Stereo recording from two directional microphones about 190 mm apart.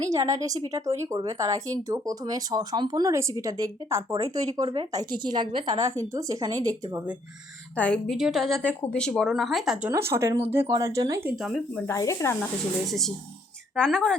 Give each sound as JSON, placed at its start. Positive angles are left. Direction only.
{"t": 0.1, "sound": "a woman's voice", "side_deg": -15}
{"t": 5.8, "sound": "speech", "side_deg": -15}
{"t": 7.8, "sound": "speech", "side_deg": 5}
{"t": 8.4, "sound": "speech", "side_deg": -15}
{"t": 8.8, "sound": "speech", "side_deg": 5}
{"t": 11.9, "sound": "speech", "side_deg": 15}
{"t": 12.9, "sound": "speech", "side_deg": 0}